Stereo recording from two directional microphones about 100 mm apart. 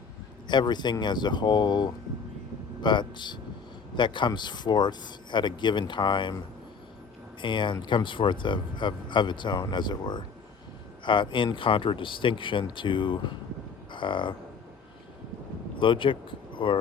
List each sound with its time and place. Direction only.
0.4 s speech: 45° left (ahead or behind)
7.4 s speech: 50° left (ahead or behind)
15.8 s speech: 55° left (ahead or behind)